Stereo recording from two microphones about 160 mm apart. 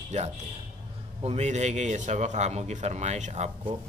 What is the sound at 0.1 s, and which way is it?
A man's voice, 45° right (ahead or behind).